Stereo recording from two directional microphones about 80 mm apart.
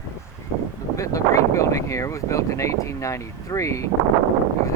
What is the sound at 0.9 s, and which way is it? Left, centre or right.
Speech, left.